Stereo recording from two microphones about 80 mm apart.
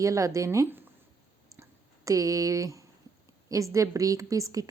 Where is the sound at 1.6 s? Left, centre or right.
Right.